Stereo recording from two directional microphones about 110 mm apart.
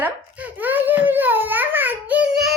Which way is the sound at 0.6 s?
15° right (ahead or behind).